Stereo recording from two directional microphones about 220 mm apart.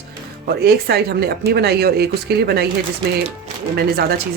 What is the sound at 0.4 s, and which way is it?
Speech, 45° right (ahead or behind).